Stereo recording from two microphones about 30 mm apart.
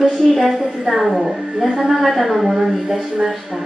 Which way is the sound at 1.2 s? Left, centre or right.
Centre.